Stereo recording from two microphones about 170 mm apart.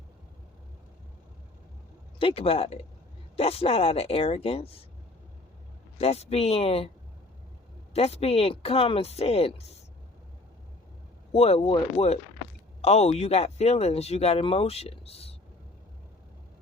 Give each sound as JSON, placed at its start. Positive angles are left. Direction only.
{"t": 2.1, "sound": "speech", "side_deg": 35}
{"t": 6.0, "sound": "speech", "side_deg": 35}
{"t": 7.9, "sound": "speech", "side_deg": 35}
{"t": 11.3, "sound": "speech", "side_deg": 35}